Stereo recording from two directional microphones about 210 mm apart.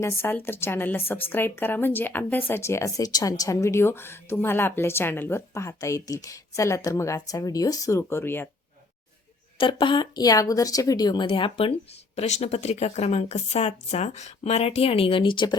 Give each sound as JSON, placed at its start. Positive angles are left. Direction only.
{"t": 0.0, "sound": "speech", "side_deg": 10}
{"t": 9.6, "sound": "a woman's voice", "side_deg": 25}